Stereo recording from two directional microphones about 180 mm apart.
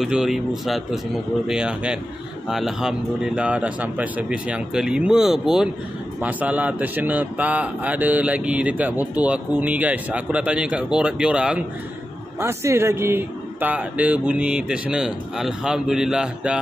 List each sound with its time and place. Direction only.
0.0 s a man's voice: centre (ahead or behind)